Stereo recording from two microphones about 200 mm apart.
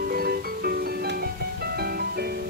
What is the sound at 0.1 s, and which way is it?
Music, 50° right (ahead or behind).